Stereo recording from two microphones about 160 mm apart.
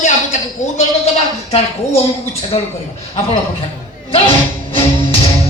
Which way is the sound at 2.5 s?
40° left (ahead or behind).